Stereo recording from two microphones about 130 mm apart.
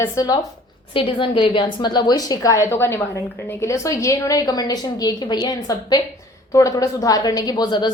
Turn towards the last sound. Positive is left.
turn(degrees=35)  # may be behind; listen again after turning